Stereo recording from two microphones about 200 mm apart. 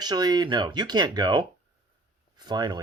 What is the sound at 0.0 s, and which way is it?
Speech, 20° right (ahead or behind).